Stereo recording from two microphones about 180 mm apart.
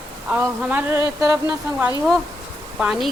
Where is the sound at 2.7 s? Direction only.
Centre (ahead or behind).